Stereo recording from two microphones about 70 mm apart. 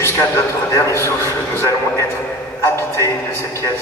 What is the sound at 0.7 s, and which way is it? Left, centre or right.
A man's voice, left.